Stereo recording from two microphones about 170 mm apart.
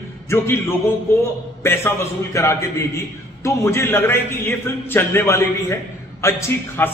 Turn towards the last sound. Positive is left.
turn(degrees=15)  # may be behind; listen again after turning